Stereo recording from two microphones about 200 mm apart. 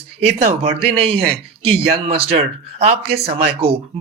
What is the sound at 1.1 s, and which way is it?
Speech, 55° right (ahead or behind).